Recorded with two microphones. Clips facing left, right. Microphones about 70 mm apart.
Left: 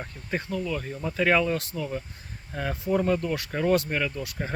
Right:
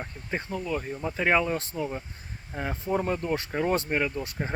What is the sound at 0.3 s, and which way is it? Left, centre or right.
Speech, right.